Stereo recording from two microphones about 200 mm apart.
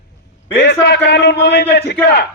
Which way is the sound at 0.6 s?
60° left (ahead or behind).